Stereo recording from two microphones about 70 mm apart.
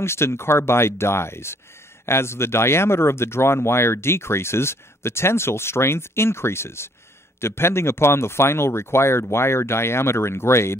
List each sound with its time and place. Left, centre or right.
0.0 s speech: left